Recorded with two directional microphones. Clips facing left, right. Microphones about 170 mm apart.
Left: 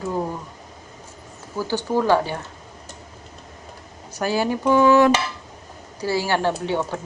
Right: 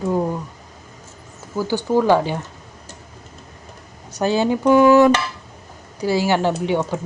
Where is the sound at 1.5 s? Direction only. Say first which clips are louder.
Right 4 dB; 15° right (ahead or behind).